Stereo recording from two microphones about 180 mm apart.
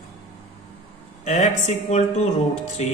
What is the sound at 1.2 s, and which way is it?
A man's voice, 40° left (ahead or behind).